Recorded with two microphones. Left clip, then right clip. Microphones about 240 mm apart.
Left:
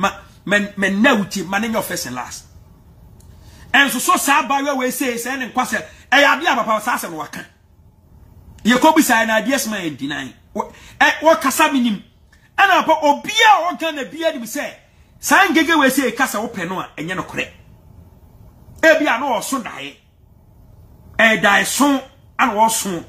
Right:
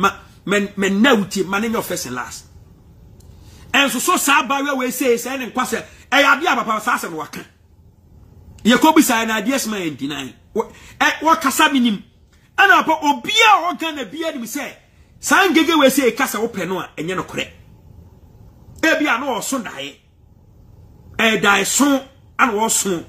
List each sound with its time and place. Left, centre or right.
0.7 s a man's voice: centre
3.5 s a woman's voice: centre
8.7 s a man's voice: centre
18.8 s a man's voice: centre
21.2 s a man's voice: centre